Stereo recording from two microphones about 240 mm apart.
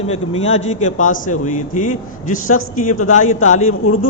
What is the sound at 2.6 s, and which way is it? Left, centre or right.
Speech, left.